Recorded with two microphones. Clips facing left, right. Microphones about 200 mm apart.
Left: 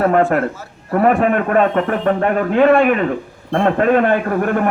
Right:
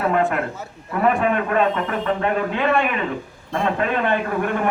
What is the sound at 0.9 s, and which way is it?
A man's voice, 60° left (ahead or behind).